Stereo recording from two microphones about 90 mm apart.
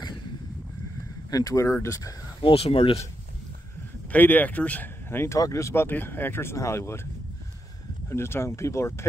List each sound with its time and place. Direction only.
1.3 s speech: 40° left (ahead or behind)
2.4 s speech: 90° left
4.1 s speech: 20° left (ahead or behind)
8.1 s speech: 30° left (ahead or behind)